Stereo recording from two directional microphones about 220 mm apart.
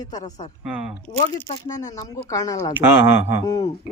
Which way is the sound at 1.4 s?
15° left (ahead or behind).